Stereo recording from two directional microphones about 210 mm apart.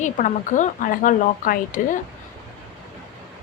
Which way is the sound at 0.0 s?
35° left (ahead or behind).